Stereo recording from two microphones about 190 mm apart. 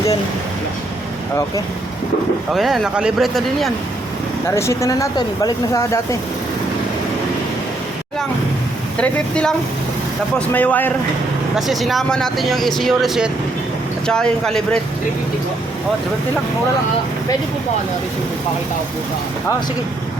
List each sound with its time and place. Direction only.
2.5 s speech: centre (ahead or behind)
4.4 s speech: 15° left (ahead or behind)
9.0 s speech: 5° left (ahead or behind)
11.5 s speech: centre (ahead or behind)